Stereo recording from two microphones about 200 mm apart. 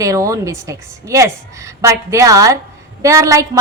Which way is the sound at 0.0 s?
15° right (ahead or behind).